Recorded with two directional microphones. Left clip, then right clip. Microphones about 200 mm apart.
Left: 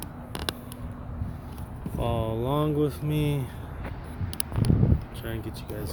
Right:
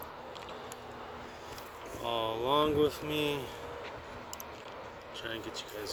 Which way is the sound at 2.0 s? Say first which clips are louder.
Left 2 dB; 15° left (ahead or behind).